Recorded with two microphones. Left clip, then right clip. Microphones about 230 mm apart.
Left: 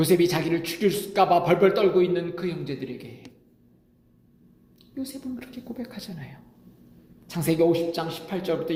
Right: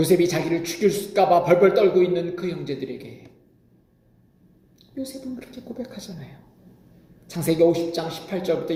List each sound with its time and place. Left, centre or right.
0.0 s a man's voice: left
4.9 s a man's voice: left
7.3 s a man's voice: left